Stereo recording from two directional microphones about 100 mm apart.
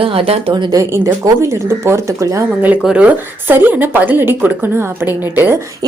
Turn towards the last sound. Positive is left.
turn(degrees=-20)  # may be behind; listen again after turning